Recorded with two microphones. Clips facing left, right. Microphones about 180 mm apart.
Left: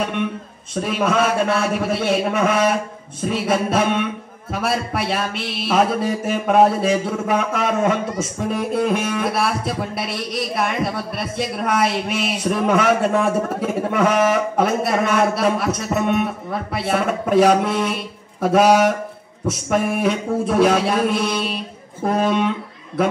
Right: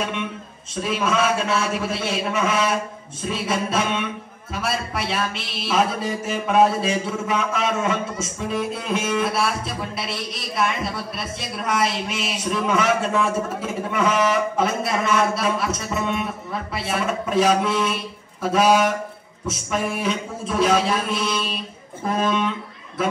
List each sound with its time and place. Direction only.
0.8 s a man's voice: 55° left (ahead or behind)